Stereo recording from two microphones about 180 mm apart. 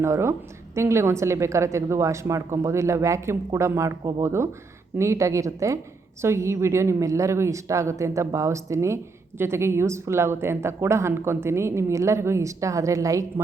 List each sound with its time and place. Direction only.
0.0 s a woman's voice: 15° right (ahead or behind)